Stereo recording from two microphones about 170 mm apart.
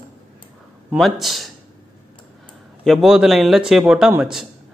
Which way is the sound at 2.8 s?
Centre (ahead or behind).